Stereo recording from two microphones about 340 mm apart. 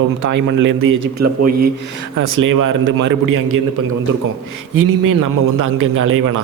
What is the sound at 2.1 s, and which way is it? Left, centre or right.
A man's voice, right.